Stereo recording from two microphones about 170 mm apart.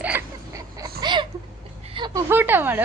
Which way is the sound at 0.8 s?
25° right (ahead or behind).